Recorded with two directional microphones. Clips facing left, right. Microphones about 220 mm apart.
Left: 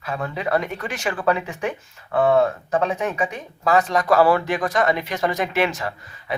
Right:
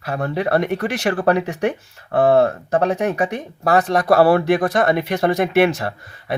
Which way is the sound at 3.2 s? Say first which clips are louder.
Right 3 dB; 60° right (ahead or behind).